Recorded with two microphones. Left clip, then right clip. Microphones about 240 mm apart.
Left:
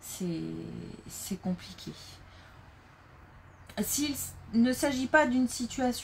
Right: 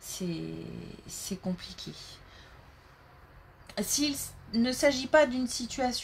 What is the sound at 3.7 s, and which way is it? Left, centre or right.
A woman's voice, right.